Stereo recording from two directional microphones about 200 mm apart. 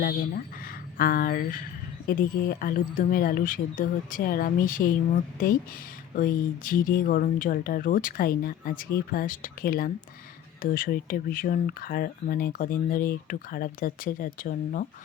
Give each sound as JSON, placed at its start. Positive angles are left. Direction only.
{"t": 0.0, "sound": "speech", "side_deg": 45}